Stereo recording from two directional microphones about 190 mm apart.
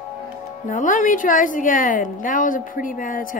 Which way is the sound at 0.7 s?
40° left (ahead or behind).